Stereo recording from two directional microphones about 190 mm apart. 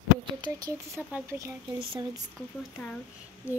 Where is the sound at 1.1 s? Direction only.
10° right (ahead or behind).